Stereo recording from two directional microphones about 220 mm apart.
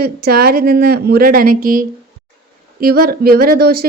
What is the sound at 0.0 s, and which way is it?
Speech, 45° right (ahead or behind).